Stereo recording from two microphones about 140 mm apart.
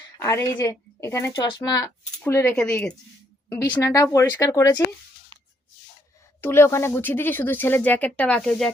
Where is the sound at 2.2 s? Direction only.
15° left (ahead or behind).